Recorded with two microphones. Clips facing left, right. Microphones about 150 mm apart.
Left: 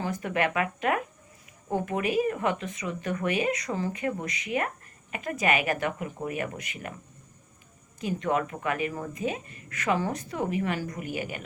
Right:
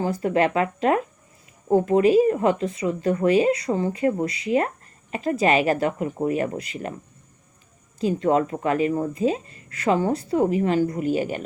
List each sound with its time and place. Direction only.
0.0 s speech: 30° right (ahead or behind)
7.9 s speech: 30° right (ahead or behind)